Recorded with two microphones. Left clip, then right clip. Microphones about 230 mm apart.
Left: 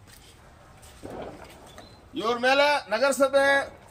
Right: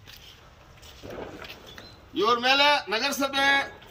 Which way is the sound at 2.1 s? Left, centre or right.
Centre.